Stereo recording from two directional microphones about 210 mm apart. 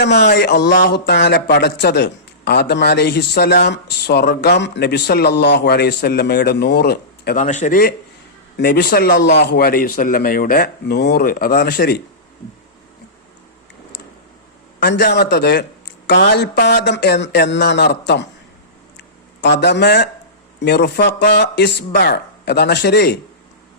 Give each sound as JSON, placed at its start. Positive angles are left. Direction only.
{"t": 0.0, "sound": "speech", "side_deg": 55}
{"t": 7.4, "sound": "a man's voice", "side_deg": 35}
{"t": 14.8, "sound": "speech", "side_deg": 50}
{"t": 18.9, "sound": "a sound", "side_deg": 55}
{"t": 20.6, "sound": "speech", "side_deg": 50}